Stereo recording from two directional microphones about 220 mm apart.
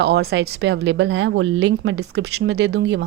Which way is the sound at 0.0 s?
45° right (ahead or behind).